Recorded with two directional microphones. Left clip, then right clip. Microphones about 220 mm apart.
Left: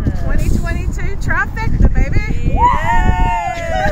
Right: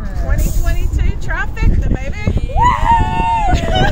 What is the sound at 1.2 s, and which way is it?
Speech, 5° right (ahead or behind).